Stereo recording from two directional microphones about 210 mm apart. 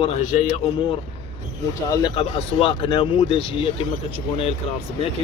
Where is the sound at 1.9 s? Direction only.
20° left (ahead or behind).